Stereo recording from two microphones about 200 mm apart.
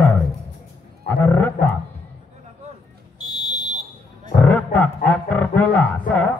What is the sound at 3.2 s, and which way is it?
Buzzer, 20° left (ahead or behind).